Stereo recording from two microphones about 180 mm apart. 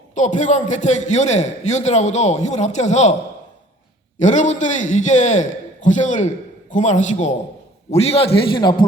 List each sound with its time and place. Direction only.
0.1 s a man's voice: 45° left (ahead or behind)
4.2 s a man's voice: 40° left (ahead or behind)